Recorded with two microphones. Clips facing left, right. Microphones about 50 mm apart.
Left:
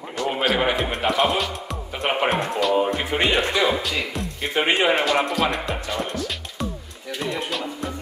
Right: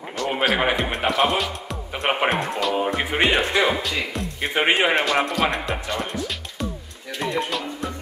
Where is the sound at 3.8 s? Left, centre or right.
Centre.